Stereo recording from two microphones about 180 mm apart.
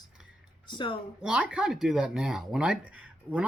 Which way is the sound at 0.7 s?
25° left (ahead or behind).